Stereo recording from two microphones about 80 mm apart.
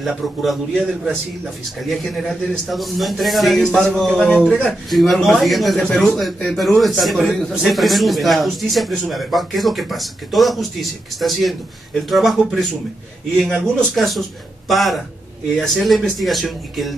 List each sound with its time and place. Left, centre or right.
0.0 s speech: centre